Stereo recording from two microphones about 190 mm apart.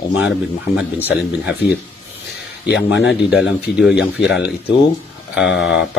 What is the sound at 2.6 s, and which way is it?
Speech, 65° left (ahead or behind).